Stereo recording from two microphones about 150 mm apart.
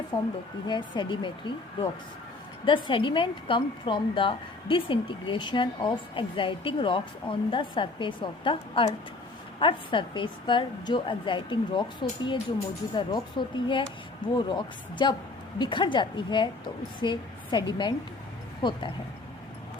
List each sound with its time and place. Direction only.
0.1 s speech: 20° left (ahead or behind)
0.7 s a woman's voice: 30° left (ahead or behind)
2.6 s a woman's voice: 35° left (ahead or behind)